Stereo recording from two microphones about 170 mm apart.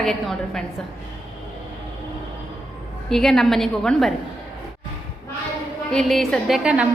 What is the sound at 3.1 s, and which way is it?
A woman's voice, centre (ahead or behind).